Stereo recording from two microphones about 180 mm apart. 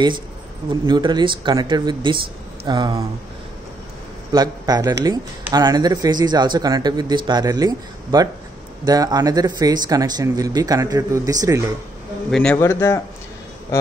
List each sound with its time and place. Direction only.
0.8 s speech: 25° right (ahead or behind)
4.3 s speech: 20° right (ahead or behind)
12.3 s a man's voice: 5° left (ahead or behind)